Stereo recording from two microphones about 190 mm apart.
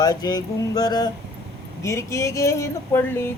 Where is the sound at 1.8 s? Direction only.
15° left (ahead or behind).